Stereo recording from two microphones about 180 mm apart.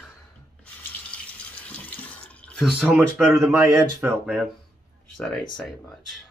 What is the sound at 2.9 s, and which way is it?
Speech, 10° right (ahead or behind).